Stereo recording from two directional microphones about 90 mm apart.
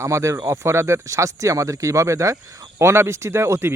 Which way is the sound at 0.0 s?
35° right (ahead or behind).